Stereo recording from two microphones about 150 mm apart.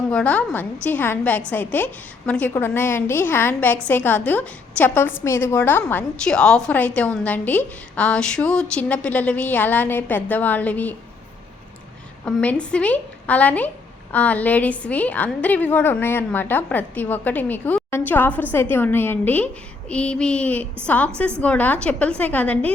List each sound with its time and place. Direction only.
0.1 s a woman's voice: 10° left (ahead or behind)
12.2 s a woman's voice: 10° left (ahead or behind)